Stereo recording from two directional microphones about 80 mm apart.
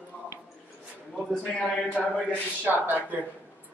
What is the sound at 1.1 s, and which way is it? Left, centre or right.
Speech, centre.